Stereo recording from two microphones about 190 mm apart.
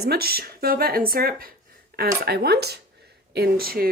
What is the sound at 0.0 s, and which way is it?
Speech, 55° right (ahead or behind).